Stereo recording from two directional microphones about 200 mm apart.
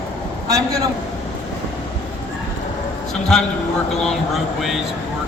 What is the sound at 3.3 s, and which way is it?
Speech, centre (ahead or behind).